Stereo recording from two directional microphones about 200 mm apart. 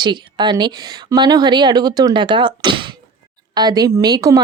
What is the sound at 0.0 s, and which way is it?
Speech, 20° right (ahead or behind).